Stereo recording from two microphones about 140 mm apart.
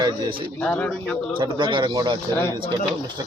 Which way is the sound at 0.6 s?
10° left (ahead or behind).